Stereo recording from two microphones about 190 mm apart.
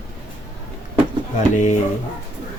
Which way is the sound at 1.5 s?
40° left (ahead or behind).